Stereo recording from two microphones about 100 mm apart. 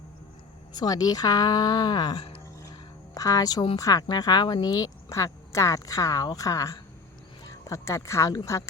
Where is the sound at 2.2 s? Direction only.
70° left (ahead or behind).